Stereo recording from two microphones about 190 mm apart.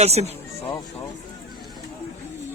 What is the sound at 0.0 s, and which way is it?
Speech, 35° right (ahead or behind).